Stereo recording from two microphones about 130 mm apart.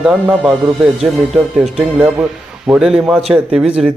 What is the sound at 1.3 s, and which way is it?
Speech, centre (ahead or behind).